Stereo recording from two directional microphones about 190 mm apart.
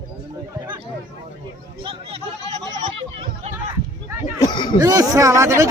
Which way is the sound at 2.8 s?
40° right (ahead or behind).